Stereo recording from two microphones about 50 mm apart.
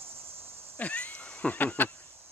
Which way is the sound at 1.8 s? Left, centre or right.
Left.